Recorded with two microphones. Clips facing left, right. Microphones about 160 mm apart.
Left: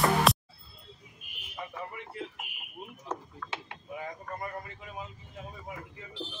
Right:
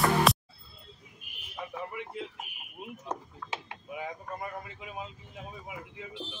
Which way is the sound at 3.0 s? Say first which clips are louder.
Left 1 dB; 20° right (ahead or behind).